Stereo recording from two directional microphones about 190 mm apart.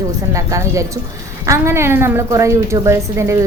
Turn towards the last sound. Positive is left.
turn(degrees=-15)  # may be behind; listen again after turning